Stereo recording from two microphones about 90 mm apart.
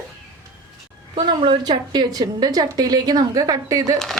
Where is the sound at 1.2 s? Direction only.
65° right (ahead or behind).